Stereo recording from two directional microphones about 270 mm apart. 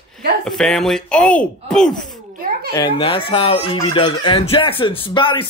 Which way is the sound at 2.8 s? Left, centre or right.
Centre.